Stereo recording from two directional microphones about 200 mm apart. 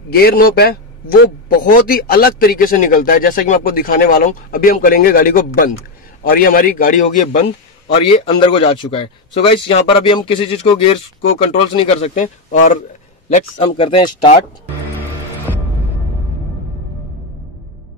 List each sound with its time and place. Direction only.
0.1 s a man's voice: 50° left (ahead or behind)
8.0 s speech: 25° left (ahead or behind)
12.2 s speech: 40° left (ahead or behind)